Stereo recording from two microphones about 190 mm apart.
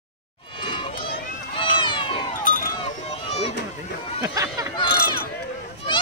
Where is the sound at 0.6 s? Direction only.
25° left (ahead or behind).